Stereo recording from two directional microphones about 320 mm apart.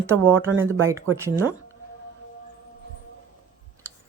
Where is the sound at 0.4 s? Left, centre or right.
Centre.